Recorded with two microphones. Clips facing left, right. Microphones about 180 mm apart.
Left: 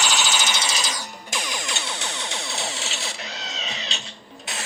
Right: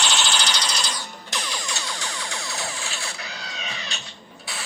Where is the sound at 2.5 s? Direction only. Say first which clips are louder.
Left 1 dB; 70° left (ahead or behind).